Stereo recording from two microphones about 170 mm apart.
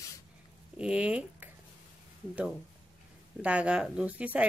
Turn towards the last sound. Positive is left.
turn(degrees=-10)  # may be behind; listen again after turning